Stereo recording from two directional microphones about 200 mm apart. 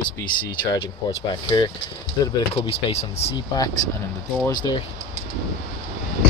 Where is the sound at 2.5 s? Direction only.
30° left (ahead or behind).